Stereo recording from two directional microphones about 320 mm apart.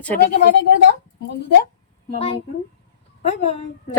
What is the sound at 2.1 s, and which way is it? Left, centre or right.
A woman's voice, centre.